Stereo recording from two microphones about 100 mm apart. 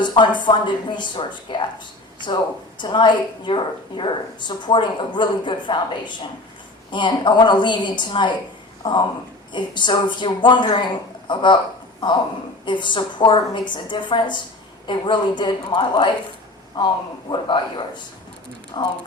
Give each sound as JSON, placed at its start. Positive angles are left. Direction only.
{"t": 0.0, "sound": "a woman's voice", "side_deg": 50}